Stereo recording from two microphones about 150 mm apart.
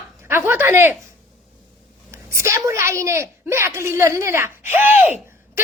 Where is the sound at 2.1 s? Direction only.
20° right (ahead or behind).